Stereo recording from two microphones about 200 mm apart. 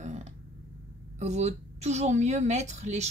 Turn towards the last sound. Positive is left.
turn(degrees=-35)  # may be behind; listen again after turning